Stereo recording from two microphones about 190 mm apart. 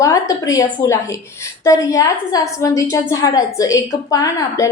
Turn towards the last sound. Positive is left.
turn(degrees=15)  # may be behind; listen again after turning